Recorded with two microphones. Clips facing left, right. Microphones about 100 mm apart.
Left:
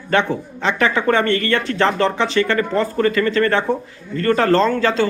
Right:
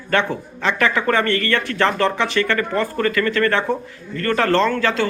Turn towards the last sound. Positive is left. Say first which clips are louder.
# left 2 dB
turn(degrees=30)  # may be behind; listen again after turning